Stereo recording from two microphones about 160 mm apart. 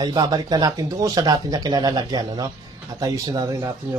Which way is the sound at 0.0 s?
25° right (ahead or behind).